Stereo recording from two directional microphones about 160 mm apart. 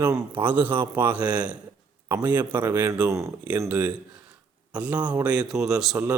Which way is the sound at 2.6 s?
10° right (ahead or behind).